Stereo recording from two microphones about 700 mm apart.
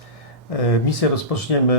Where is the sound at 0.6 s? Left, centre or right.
Left.